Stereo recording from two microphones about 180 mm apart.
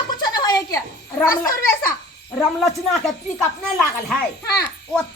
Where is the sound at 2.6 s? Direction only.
Centre (ahead or behind).